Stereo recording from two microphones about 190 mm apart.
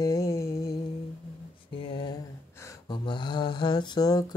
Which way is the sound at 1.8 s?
25° left (ahead or behind).